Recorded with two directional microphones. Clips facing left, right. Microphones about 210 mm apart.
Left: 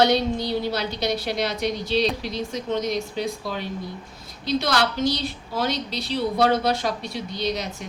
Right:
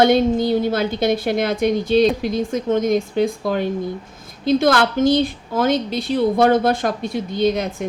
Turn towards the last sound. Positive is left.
turn(degrees=-50)  # may be behind; listen again after turning